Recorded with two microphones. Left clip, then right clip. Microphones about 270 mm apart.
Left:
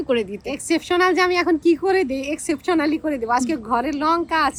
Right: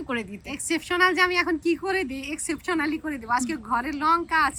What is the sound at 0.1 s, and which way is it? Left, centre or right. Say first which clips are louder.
Speech: left 9 dB; centre.